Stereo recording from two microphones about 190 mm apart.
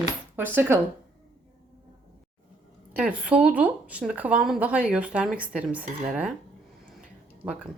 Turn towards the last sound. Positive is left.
turn(degrees=-5)  # may be behind; listen again after turning